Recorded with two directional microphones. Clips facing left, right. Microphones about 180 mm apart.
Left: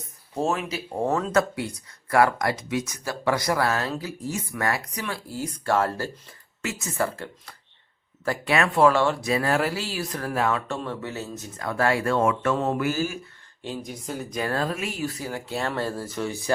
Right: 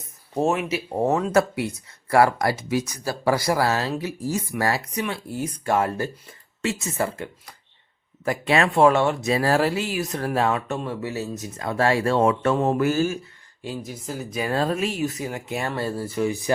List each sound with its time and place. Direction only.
0.7 s speech: 20° right (ahead or behind)
6.6 s speech: 30° right (ahead or behind)
11.0 s speech: centre (ahead or behind)
11.3 s speech: 25° right (ahead or behind)
12.8 s speech: 45° right (ahead or behind)
13.6 s speech: 5° right (ahead or behind)
14.5 s speech: 30° right (ahead or behind)
14.9 s speech: 20° right (ahead or behind)